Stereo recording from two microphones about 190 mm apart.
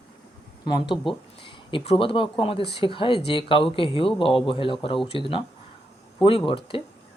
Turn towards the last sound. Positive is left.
turn(degrees=30)  # may be behind; listen again after turning